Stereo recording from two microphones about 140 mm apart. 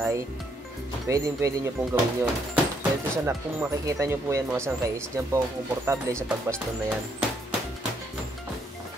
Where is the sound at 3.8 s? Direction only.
20° right (ahead or behind).